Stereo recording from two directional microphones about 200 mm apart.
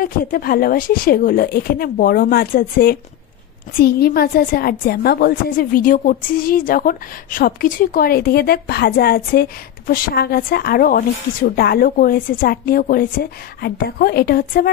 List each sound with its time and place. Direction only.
0.0 s a woman's voice: 45° left (ahead or behind)